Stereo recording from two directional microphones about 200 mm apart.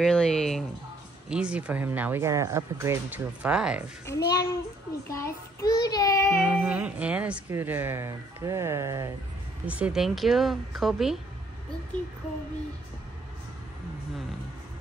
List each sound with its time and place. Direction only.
0.0 s speech: 5° left (ahead or behind)
4.0 s child singing: 15° left (ahead or behind)
6.4 s speech: 5° right (ahead or behind)